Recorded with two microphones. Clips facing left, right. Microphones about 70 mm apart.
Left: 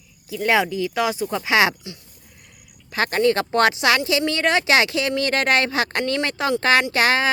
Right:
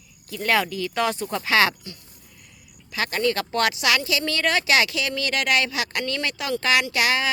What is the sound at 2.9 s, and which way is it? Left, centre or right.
Speech, left.